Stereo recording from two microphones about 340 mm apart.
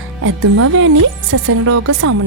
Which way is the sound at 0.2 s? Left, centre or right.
Right.